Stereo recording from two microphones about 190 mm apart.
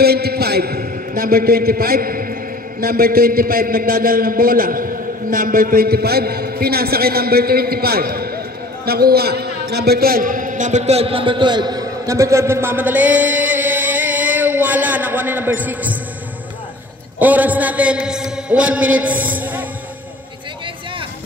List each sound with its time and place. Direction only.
0.0 s a man's voice: 55° right (ahead or behind); by 16.0 s 10° right (ahead or behind)
17.2 s a man's voice: 10° right (ahead or behind)